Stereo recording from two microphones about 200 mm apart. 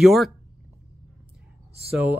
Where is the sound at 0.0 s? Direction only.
Centre (ahead or behind).